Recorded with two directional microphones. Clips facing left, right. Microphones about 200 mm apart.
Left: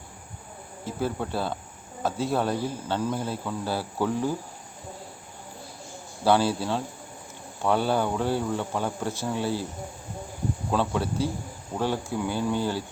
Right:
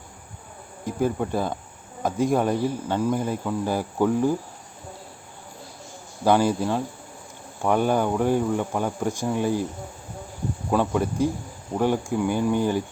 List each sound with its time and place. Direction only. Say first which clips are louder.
0.9 s speech: right 5 dB; 15° right (ahead or behind)
6.2 s speech: right 3 dB; 15° right (ahead or behind)
10.7 s speech: right 4 dB; 10° right (ahead or behind)